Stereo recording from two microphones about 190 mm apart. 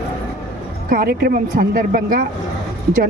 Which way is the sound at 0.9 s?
55° right (ahead or behind).